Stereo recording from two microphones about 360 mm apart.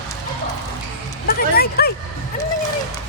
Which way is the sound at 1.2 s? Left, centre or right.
Left.